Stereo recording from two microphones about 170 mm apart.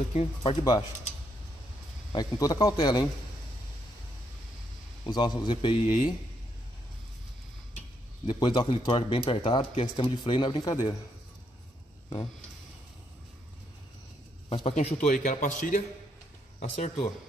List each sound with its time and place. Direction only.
0.1 s speech: 35° left (ahead or behind)
2.1 s speech: 20° left (ahead or behind)
5.0 s speech: 25° left (ahead or behind)
8.3 s speech: 25° left (ahead or behind)
14.5 s a man's voice: 35° left (ahead or behind)